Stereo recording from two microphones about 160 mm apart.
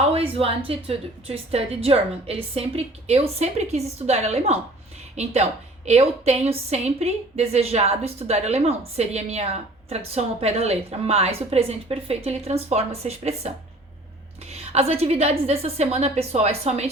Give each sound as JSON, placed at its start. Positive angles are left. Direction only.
{"t": 0.0, "sound": "a woman's voice", "side_deg": -40}